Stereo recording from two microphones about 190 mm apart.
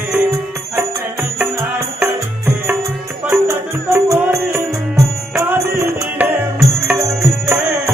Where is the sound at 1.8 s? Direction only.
10° right (ahead or behind).